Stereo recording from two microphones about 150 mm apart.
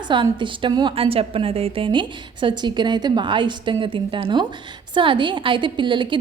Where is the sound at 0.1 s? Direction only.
35° right (ahead or behind).